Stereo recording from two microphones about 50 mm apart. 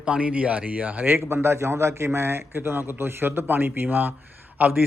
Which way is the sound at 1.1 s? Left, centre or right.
Right.